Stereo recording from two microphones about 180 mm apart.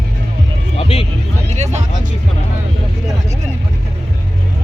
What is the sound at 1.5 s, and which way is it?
Music, 40° right (ahead or behind).